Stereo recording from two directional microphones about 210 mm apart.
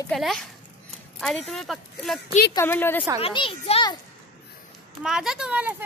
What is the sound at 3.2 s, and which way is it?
Speech, 25° left (ahead or behind).